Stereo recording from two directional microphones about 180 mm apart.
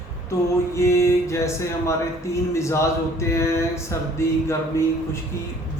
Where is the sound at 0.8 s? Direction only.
15° left (ahead or behind).